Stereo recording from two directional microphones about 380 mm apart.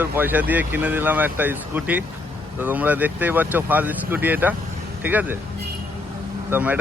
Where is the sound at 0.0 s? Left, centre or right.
Centre.